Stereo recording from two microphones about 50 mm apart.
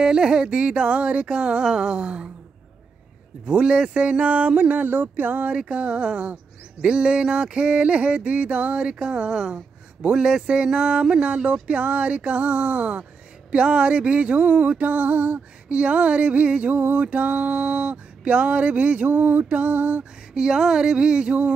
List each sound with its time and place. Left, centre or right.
0.0 s music: centre
3.4 s music: right
5.7 s music: right
20.3 s music: centre